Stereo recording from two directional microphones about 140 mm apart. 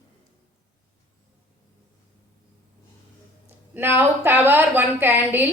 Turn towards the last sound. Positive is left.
turn(degrees=-15)  # may be behind; listen again after turning